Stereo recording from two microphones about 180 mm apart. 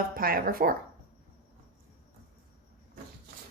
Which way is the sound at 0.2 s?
55° right (ahead or behind).